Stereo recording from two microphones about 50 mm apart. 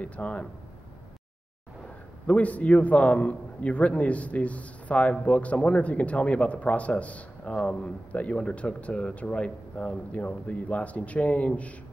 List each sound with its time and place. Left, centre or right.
0.0 s speech: left
2.2 s speech: left